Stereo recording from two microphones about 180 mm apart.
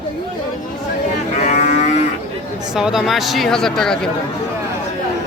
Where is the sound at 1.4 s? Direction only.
40° left (ahead or behind).